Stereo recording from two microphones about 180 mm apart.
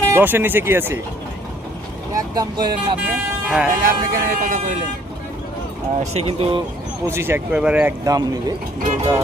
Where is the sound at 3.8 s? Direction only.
50° right (ahead or behind).